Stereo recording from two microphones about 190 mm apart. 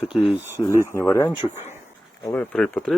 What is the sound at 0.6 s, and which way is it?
Speech, 20° left (ahead or behind).